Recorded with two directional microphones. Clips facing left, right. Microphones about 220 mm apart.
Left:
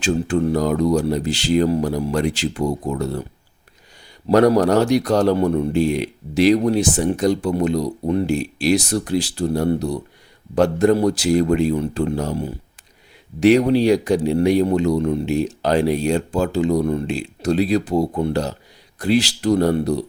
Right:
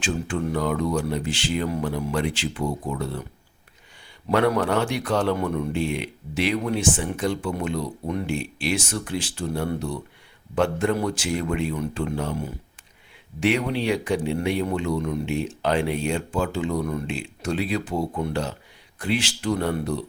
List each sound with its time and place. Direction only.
0.0 s a man's voice: 40° left (ahead or behind)
4.3 s a man's voice: 40° left (ahead or behind)